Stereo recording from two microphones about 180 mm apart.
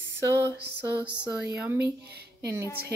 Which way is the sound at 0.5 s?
10° right (ahead or behind).